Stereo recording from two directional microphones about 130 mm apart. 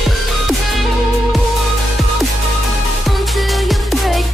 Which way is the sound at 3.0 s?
Centre (ahead or behind).